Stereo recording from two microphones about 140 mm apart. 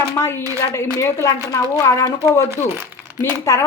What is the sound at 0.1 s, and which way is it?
A woman's voice, 20° left (ahead or behind).